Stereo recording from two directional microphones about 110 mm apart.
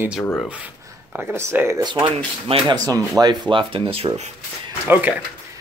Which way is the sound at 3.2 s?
45° right (ahead or behind).